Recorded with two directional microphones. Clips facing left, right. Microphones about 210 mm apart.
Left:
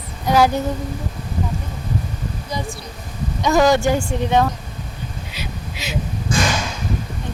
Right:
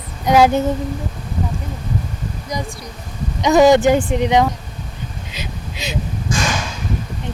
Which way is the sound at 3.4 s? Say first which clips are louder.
Right 4 dB; 20° right (ahead or behind).